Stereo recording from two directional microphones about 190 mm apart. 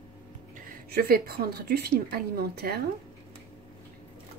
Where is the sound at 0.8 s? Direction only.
55° right (ahead or behind).